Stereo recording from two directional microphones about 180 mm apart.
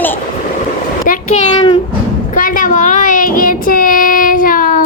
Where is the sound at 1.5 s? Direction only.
25° left (ahead or behind).